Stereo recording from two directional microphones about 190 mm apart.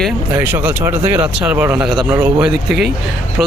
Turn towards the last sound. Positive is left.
turn(degrees=0)  # may be behind; listen again after turning